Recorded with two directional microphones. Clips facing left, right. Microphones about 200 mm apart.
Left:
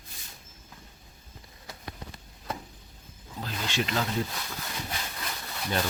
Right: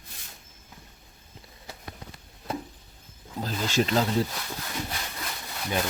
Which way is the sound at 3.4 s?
40° right (ahead or behind).